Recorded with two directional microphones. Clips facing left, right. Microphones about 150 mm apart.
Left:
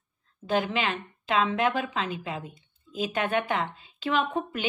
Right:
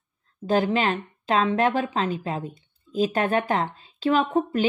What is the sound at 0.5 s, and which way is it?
Speech, 35° right (ahead or behind).